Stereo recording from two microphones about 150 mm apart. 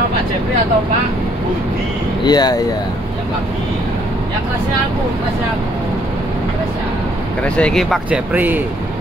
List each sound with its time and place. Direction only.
2.2 s speech: 25° left (ahead or behind)
7.4 s speech: 5° left (ahead or behind)
8.1 s speech: 10° right (ahead or behind)